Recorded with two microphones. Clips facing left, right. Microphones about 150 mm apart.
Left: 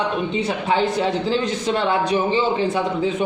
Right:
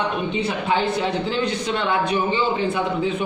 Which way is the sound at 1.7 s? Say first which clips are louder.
Left 5 dB; 35° left (ahead or behind).